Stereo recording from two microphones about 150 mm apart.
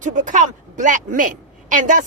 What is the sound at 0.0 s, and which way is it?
A woman's voice, 55° right (ahead or behind).